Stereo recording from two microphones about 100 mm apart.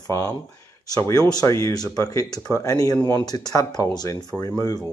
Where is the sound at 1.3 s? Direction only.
35° left (ahead or behind).